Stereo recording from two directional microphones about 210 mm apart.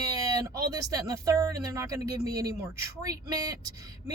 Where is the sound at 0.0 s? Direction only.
15° right (ahead or behind).